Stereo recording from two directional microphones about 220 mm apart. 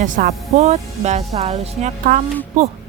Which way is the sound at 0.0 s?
35° right (ahead or behind).